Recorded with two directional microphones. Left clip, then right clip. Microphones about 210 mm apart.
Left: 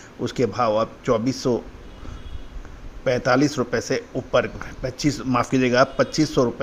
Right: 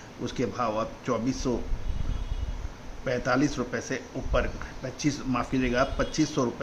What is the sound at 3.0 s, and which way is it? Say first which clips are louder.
A man's voice: left 7 dB; 40° left (ahead or behind).